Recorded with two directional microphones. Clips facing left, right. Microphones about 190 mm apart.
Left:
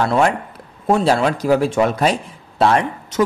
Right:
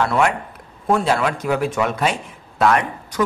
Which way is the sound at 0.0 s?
30° left (ahead or behind).